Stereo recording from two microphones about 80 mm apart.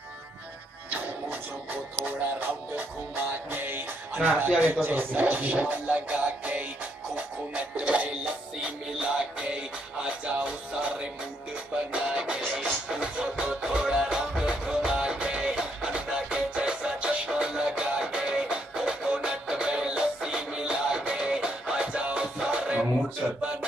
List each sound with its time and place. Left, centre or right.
3.5 s music: right